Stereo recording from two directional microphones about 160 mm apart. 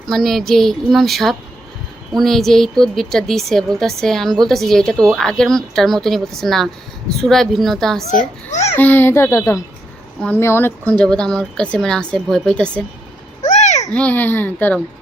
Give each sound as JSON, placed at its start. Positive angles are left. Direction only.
{"t": 0.1, "sound": "a woman's voice", "side_deg": 0}
{"t": 8.4, "sound": "a child's voice", "side_deg": 45}
{"t": 8.7, "sound": "a child's voice", "side_deg": 10}
{"t": 13.4, "sound": "babbling", "side_deg": 45}
{"t": 13.9, "sound": "a child's voice", "side_deg": 10}